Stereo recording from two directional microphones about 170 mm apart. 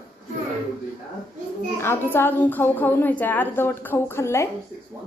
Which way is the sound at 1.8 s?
15° left (ahead or behind).